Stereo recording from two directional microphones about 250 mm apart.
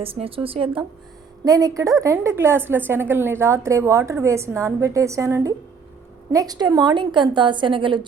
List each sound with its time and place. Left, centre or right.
0.0 s a woman's voice: right